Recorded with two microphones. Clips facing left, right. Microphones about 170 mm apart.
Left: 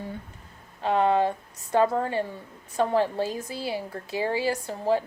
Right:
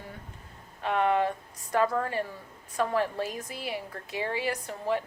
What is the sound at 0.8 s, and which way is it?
A woman's voice, 30° left (ahead or behind).